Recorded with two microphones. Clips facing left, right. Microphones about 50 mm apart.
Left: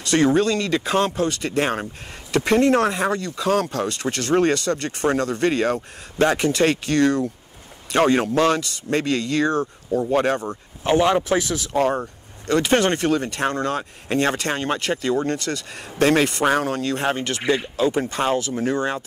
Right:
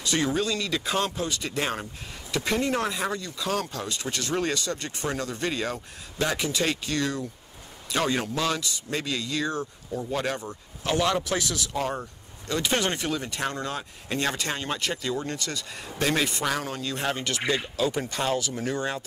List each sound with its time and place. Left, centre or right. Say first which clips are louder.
0.0 s speech: left 8 dB; left
2.3 s speech: left 9 dB; left
7.9 s speech: left 9 dB; left
10.8 s speech: left 7 dB; left
12.4 s speech: left 8 dB; left
16.9 s speech: left 6 dB; left